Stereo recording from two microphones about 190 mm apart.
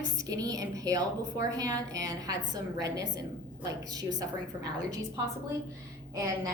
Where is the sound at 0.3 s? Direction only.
20° right (ahead or behind).